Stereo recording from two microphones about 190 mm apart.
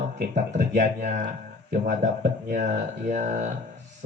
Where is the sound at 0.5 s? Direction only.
40° right (ahead or behind).